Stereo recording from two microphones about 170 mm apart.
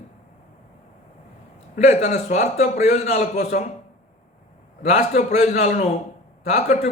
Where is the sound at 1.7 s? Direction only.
45° left (ahead or behind).